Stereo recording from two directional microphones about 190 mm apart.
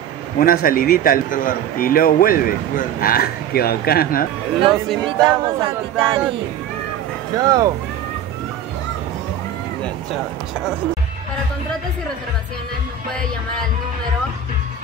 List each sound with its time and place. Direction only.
0.4 s a man's voice: 50° left (ahead or behind)
5.2 s speech: 25° right (ahead or behind)
7.3 s speech: 20° right (ahead or behind)